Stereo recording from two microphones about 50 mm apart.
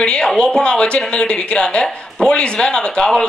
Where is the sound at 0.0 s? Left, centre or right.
Centre.